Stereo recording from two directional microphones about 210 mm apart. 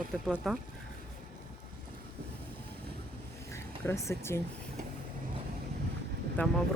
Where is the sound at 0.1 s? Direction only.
Centre (ahead or behind).